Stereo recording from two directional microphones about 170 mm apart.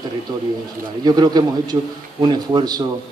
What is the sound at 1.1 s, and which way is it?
Speech, 25° right (ahead or behind).